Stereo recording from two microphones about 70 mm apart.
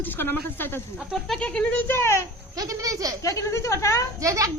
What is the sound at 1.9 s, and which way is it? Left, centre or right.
Speech, left.